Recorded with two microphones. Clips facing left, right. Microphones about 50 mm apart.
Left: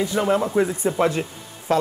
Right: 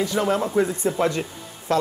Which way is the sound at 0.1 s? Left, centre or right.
Centre.